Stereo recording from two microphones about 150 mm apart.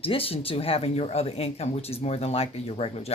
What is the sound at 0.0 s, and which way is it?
Speech, 40° left (ahead or behind).